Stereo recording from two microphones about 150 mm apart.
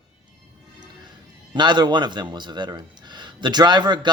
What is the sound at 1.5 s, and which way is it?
Speech, 30° right (ahead or behind).